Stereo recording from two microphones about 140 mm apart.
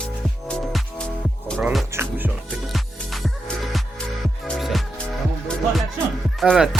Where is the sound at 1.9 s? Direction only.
15° right (ahead or behind).